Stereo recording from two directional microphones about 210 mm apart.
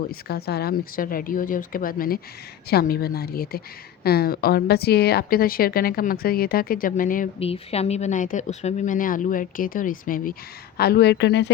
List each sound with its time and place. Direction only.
0.1 s a woman's voice: 50° left (ahead or behind)
7.3 s a woman's voice: 30° left (ahead or behind); by 11.5 s 55° left (ahead or behind)